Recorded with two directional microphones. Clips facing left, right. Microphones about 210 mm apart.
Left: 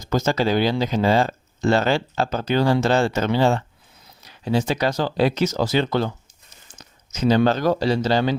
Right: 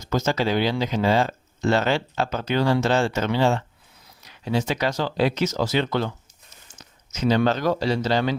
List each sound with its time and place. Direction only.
0.0 s speech: 35° left (ahead or behind)
7.1 s speech: 35° left (ahead or behind)